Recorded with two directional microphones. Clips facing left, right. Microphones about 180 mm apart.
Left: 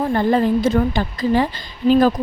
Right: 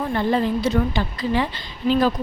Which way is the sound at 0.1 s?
45° left (ahead or behind).